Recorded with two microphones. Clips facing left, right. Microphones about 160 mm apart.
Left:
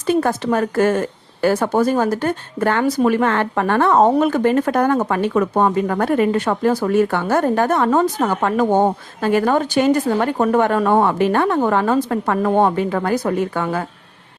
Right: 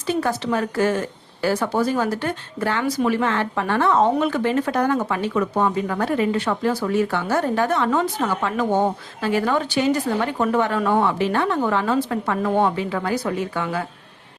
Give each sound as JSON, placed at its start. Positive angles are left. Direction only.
{"t": 0.1, "sound": "speech", "side_deg": 50}